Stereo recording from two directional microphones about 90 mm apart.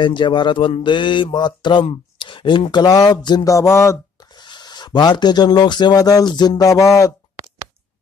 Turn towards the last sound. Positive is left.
turn(degrees=35)  # may be behind; listen again after turning